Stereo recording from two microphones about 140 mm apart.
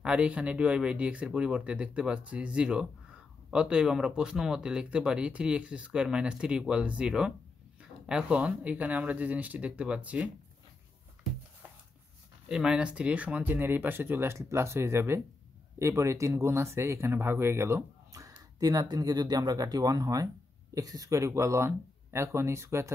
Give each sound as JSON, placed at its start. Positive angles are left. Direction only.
{"t": 0.0, "sound": "speech", "side_deg": -10}
{"t": 12.4, "sound": "speech", "side_deg": -5}